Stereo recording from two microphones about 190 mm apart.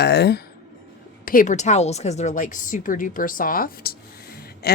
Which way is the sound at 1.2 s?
50° left (ahead or behind).